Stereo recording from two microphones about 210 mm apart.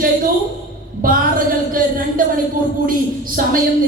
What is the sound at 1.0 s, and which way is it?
Speech, 40° right (ahead or behind).